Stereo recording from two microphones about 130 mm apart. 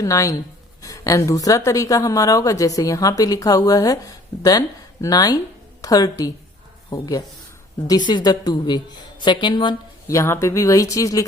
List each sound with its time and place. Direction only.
0.0 s a woman's voice: 25° left (ahead or behind)
10.1 s a woman's voice: 20° left (ahead or behind)